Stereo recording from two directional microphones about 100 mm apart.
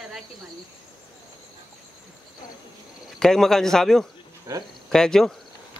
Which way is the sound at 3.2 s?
5° left (ahead or behind).